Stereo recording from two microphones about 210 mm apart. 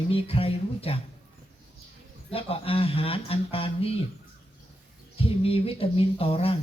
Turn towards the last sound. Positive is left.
turn(degrees=25)  # may be behind; listen again after turning